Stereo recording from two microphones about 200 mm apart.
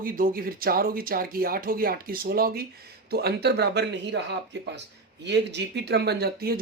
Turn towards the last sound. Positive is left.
turn(degrees=-50)  # may be behind; listen again after turning